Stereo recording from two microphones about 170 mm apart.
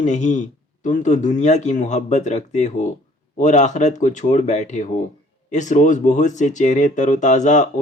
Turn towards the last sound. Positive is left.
turn(degrees=45)  # may be behind; listen again after turning